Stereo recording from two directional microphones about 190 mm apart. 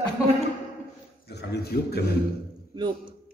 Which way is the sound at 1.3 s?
60° left (ahead or behind).